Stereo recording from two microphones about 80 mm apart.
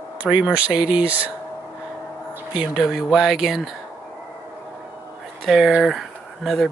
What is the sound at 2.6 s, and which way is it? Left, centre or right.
Speech, centre.